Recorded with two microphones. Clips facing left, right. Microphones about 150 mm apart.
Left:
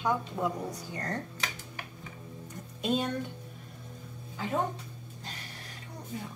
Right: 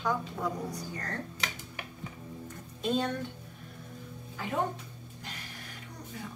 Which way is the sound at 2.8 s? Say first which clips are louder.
Even; 15° left (ahead or behind).